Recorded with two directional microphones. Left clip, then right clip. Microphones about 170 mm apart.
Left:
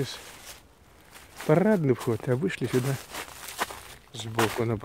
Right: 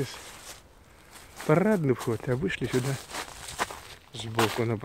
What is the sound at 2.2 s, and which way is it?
Speech, 25° left (ahead or behind).